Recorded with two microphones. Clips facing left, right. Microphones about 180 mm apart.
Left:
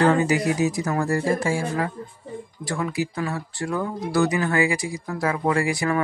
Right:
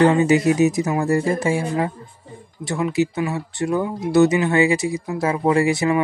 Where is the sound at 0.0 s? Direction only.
20° right (ahead or behind).